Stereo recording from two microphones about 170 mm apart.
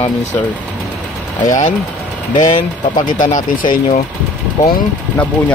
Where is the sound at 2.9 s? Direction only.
50° left (ahead or behind).